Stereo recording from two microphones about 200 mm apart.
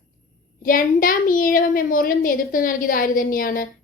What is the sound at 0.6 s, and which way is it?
A woman's voice, 45° left (ahead or behind).